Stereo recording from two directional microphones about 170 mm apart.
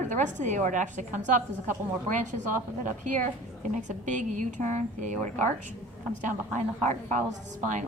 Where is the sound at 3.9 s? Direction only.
45° right (ahead or behind).